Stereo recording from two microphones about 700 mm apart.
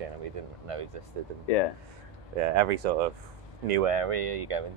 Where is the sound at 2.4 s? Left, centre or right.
Right.